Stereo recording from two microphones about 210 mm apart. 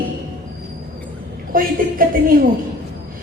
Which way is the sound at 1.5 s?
40° right (ahead or behind).